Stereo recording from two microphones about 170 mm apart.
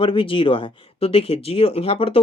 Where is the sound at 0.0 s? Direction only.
30° left (ahead or behind).